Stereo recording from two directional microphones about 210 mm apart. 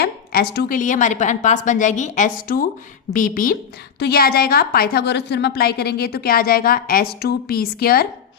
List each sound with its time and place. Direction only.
0.0 s a woman's voice: 50° left (ahead or behind)